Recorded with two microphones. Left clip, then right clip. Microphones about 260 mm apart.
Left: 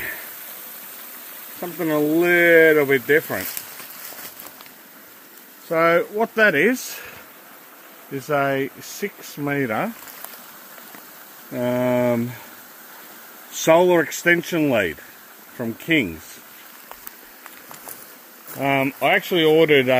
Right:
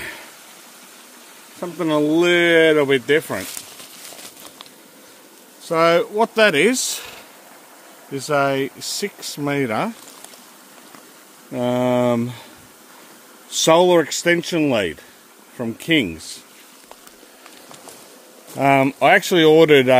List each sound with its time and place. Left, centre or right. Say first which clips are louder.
1.8 s speech: right 2 dB; centre
5.7 s speech: right 2 dB; centre
8.2 s speech: right 2 dB; centre
11.5 s speech: right 2 dB; centre
13.7 s speech: right 1 dB; centre
18.6 s speech: right 5 dB; right